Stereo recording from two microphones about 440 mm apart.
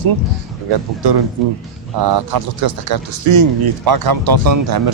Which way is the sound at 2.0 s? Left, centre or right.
Right.